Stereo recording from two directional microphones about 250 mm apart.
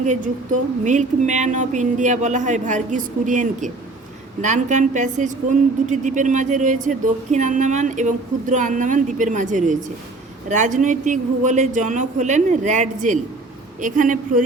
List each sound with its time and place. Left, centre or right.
0.9 s a woman's voice: right